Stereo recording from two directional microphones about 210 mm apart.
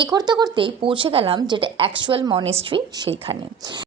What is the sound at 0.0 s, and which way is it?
Speech, 20° right (ahead or behind).